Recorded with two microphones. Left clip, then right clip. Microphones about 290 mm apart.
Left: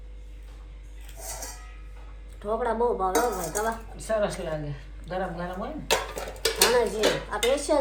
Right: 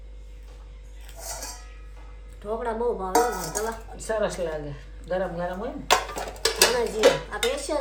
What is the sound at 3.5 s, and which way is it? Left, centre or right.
Speech, centre.